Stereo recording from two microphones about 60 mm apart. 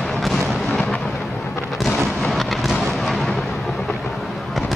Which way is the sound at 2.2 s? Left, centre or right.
Centre.